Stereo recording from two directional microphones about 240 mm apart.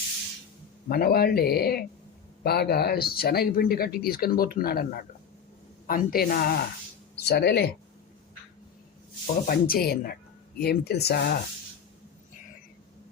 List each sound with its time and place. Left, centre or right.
0.9 s speech: left
9.5 s speech: left